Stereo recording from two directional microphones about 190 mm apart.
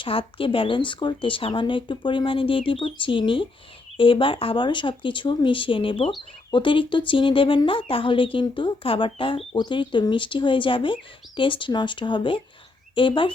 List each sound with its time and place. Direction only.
0.0 s speech: 30° left (ahead or behind)